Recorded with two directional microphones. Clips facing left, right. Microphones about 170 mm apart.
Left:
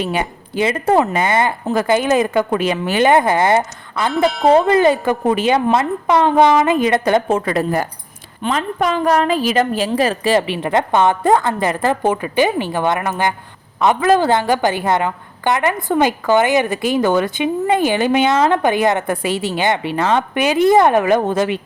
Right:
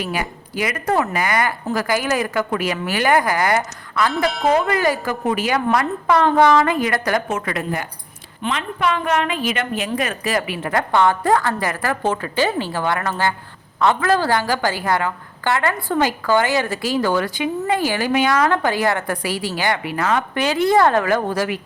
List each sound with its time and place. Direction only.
0.0 s a woman's voice: 25° left (ahead or behind)